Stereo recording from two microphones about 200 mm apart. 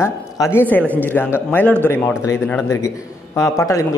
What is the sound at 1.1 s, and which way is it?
Speech, 10° left (ahead or behind).